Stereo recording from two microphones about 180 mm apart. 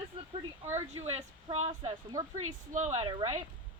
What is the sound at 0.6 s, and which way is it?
Speech, 35° right (ahead or behind).